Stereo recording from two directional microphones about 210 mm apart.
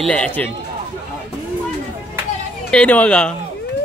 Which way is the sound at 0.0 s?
5° left (ahead or behind).